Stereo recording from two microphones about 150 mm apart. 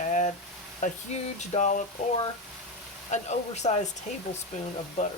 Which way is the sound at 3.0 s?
50° left (ahead or behind).